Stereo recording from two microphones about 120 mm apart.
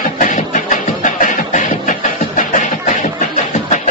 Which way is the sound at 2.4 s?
90° left.